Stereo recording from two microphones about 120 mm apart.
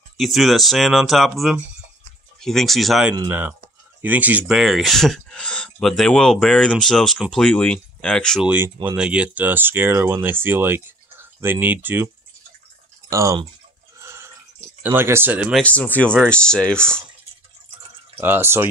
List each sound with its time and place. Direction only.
0.2 s speech: centre (ahead or behind)
3.3 s speech: 15° right (ahead or behind); by 8.4 s 5° left (ahead or behind)
8.4 s speech: 10° right (ahead or behind)
13.1 s speech: 25° right (ahead or behind)
13.9 s a sound: 20° right (ahead or behind)
14.8 s speech: 20° right (ahead or behind)
15.6 s speech: 10° left (ahead or behind)
18.2 s speech: 20° right (ahead or behind)